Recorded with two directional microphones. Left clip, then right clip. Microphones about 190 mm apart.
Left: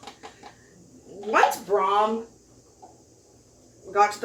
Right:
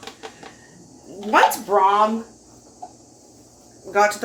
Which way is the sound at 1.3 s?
35° right (ahead or behind).